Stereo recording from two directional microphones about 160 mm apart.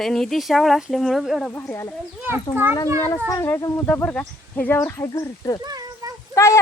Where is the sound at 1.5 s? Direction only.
15° left (ahead or behind).